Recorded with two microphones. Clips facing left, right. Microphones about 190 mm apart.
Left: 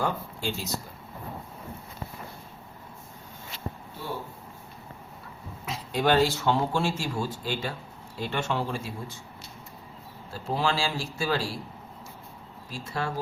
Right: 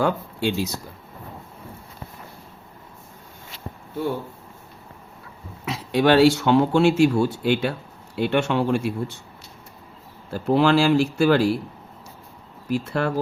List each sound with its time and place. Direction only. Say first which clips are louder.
0.0 s speech: right 7 dB; 75° right (ahead or behind)
5.6 s speech: right 6 dB; 80° right
10.3 s speech: right 10 dB; 65° right (ahead or behind)
12.6 s speech: right 9 dB; 65° right (ahead or behind)